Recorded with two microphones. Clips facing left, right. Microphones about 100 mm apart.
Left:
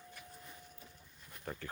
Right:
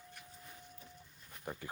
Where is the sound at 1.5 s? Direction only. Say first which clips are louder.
Even; 15° right (ahead or behind).